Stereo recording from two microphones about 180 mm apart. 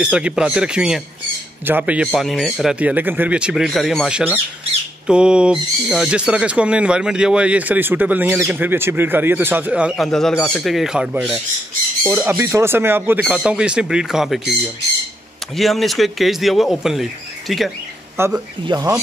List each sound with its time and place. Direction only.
0.0 s speech: 5° right (ahead or behind)
15.5 s speech: centre (ahead or behind)
18.1 s speech: 15° right (ahead or behind)